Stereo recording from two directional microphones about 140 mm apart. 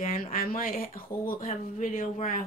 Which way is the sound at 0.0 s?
85° left.